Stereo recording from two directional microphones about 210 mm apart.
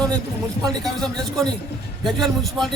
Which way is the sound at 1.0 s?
Centre (ahead or behind).